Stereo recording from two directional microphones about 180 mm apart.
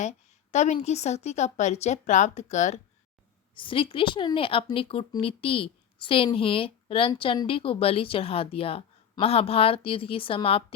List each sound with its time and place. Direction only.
0.0 s a woman's voice: 40° left (ahead or behind)
3.5 s a woman's voice: 30° left (ahead or behind)